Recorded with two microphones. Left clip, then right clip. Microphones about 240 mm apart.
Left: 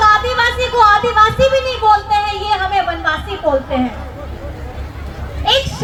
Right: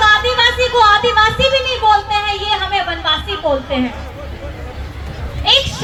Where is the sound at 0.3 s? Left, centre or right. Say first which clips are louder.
Right 1 dB; left.